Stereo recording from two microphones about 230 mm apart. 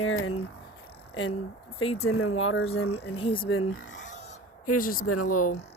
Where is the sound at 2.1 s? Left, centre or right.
Left.